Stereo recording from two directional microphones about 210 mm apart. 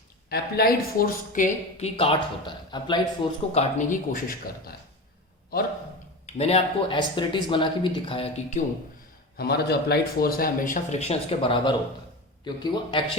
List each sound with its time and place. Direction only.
0.3 s speech: 45° left (ahead or behind); by 3.0 s 20° left (ahead or behind)
3.5 s speech: 35° left (ahead or behind)
6.2 s speech: 30° left (ahead or behind)
9.4 s a man's voice: 50° left (ahead or behind); by 13.0 s 20° left (ahead or behind)